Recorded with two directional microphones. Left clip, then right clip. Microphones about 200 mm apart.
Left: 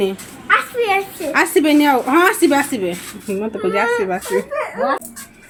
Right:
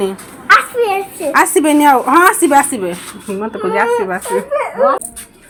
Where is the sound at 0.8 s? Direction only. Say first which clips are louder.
Right 2 dB; 15° left (ahead or behind).